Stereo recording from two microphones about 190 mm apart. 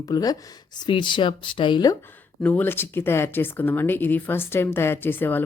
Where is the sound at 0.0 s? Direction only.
20° left (ahead or behind).